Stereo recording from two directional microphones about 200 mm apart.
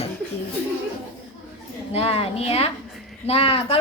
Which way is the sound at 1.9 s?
30° left (ahead or behind).